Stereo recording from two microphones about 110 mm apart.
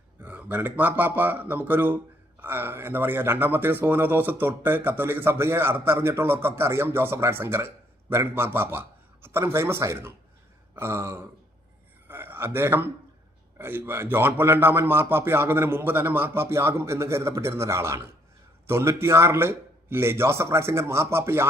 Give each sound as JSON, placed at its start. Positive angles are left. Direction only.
{"t": 0.2, "sound": "speech", "side_deg": -15}
{"t": 12.0, "sound": "a sound", "side_deg": -20}
{"t": 13.6, "sound": "speech", "side_deg": -20}